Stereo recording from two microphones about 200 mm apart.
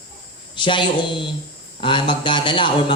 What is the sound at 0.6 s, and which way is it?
A man's voice, 25° left (ahead or behind).